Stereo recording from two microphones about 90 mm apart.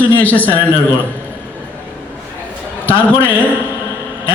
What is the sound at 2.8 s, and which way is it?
Speech, 20° left (ahead or behind).